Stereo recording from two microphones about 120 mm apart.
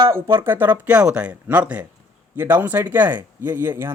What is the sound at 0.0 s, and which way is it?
Speech, 20° right (ahead or behind).